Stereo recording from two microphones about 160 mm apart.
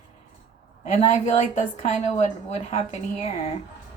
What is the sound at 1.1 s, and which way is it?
A woman's voice, 45° left (ahead or behind).